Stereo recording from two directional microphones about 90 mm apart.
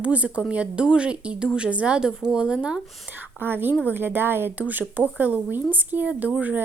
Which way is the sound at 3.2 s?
20° right (ahead or behind).